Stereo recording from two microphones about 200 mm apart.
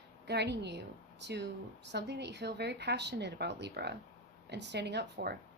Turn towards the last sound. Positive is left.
turn(degrees=-55)  # may be behind; listen again after turning